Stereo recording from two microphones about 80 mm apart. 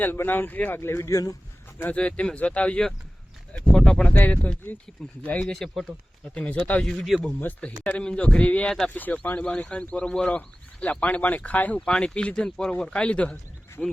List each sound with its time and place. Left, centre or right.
0.0 s speech: left
0.8 s speech: left
1.8 s speech: centre
3.7 s a sound: centre
4.2 s speech: centre
5.5 s speech: centre
6.3 s speech: centre